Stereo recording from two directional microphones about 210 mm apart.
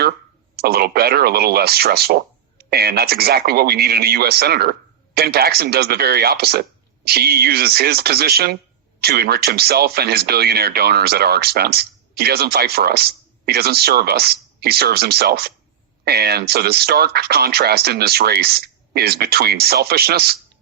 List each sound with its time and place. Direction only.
0.5 s speech: 50° right (ahead or behind)